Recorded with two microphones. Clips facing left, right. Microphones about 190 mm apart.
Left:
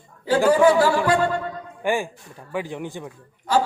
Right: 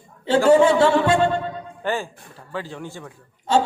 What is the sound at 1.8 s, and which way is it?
Speech, 15° left (ahead or behind).